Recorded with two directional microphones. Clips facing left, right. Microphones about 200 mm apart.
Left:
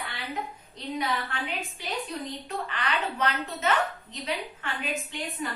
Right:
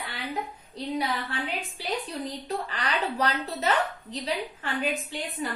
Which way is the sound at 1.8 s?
35° right (ahead or behind).